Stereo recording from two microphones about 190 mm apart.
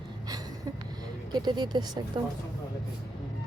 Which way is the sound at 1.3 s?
25° right (ahead or behind).